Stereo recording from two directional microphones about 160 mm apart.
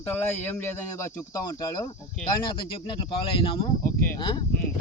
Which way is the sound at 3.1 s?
35° left (ahead or behind).